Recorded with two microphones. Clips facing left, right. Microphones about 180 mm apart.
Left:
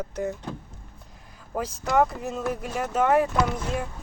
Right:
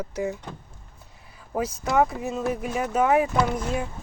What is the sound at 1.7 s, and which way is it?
Speech, 10° right (ahead or behind).